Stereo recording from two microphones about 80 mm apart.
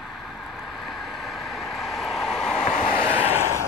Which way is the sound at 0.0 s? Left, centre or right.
Centre.